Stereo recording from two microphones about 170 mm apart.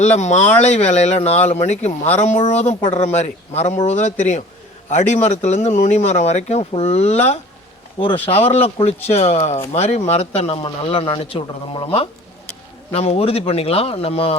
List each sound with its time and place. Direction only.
0.2 s speech: 45° left (ahead or behind)
8.0 s speech: 25° left (ahead or behind)